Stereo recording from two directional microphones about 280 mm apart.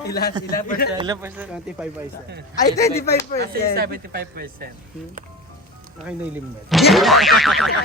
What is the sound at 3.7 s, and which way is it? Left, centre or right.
Speech, right.